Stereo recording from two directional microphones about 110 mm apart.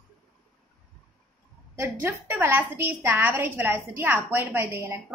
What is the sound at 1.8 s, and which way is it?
A woman's voice, 20° right (ahead or behind).